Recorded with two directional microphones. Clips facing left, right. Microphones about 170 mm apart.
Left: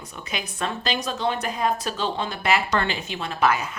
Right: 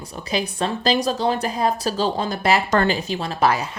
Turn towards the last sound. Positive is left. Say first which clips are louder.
# right 2 dB
turn(degrees=-35)  # may be behind; listen again after turning